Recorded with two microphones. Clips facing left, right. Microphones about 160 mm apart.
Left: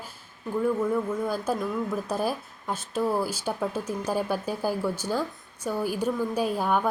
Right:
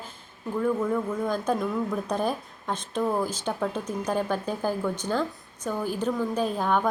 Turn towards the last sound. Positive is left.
turn(degrees=10)  # may be behind; listen again after turning